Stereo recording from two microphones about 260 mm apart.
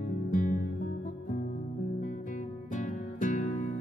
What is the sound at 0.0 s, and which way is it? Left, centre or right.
Music, left.